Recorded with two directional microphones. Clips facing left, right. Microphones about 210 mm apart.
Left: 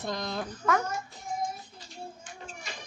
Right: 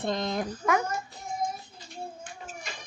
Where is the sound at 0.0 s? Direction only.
25° right (ahead or behind).